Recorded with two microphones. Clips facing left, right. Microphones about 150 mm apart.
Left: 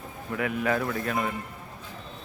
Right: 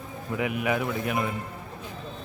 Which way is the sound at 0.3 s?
15° right (ahead or behind).